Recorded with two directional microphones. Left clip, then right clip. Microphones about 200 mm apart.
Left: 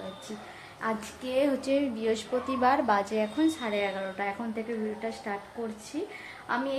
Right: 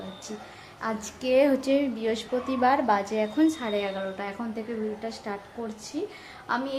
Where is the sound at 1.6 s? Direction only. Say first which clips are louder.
Right 2 dB; 20° right (ahead or behind).